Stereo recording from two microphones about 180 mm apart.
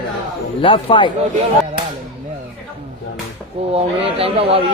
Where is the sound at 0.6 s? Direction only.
30° left (ahead or behind).